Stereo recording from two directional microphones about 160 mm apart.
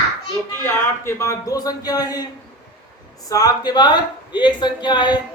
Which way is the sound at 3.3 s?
25° left (ahead or behind).